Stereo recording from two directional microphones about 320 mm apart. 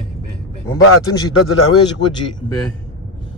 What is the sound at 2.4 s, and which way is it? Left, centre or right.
Speech, centre.